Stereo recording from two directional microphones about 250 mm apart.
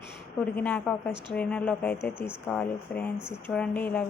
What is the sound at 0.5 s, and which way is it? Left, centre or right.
Speech, centre.